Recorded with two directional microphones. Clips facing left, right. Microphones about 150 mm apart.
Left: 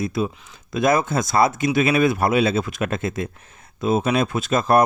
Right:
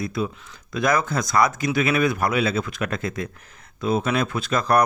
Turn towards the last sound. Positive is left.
turn(degrees=20)  # may be behind; listen again after turning